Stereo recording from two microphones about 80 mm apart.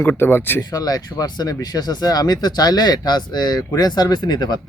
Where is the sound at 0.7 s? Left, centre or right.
Left.